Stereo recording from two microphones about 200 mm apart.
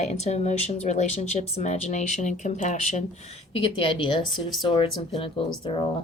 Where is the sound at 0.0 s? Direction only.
35° left (ahead or behind).